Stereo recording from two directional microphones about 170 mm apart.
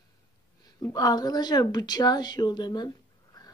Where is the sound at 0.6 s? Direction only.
20° left (ahead or behind).